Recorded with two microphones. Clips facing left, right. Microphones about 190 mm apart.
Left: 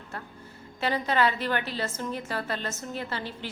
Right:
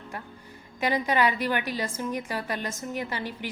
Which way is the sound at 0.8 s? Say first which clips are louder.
Right 1 dB; 15° right (ahead or behind).